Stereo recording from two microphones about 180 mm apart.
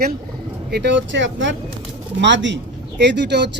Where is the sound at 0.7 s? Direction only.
75° right (ahead or behind).